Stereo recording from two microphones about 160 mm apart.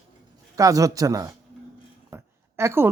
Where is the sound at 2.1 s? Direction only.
15° right (ahead or behind).